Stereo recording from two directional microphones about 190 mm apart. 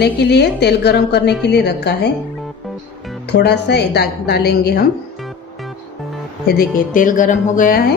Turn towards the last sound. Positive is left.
turn(degrees=45)  # may be behind; listen again after turning